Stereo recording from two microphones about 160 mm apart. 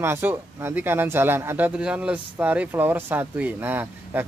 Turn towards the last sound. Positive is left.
turn(degrees=-15)  # may be behind; listen again after turning